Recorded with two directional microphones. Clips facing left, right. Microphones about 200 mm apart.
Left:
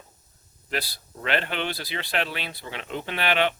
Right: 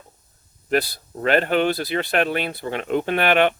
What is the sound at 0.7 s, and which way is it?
Speech, 45° right (ahead or behind).